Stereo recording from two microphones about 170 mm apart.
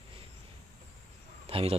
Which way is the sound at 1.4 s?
35° right (ahead or behind).